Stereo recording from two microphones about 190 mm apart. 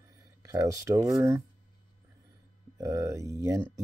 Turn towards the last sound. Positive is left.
turn(degrees=-15)  # may be behind; listen again after turning